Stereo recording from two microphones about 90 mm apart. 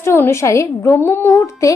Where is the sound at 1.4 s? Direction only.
35° left (ahead or behind).